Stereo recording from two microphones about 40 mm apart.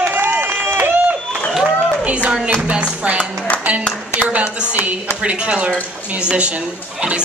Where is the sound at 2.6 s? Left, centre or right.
Right.